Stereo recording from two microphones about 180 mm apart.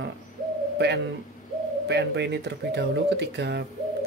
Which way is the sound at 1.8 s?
70° right (ahead or behind).